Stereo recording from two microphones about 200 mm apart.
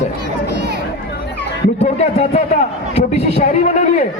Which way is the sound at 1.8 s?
35° left (ahead or behind).